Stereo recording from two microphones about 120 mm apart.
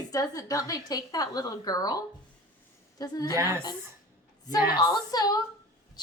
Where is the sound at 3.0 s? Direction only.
30° left (ahead or behind).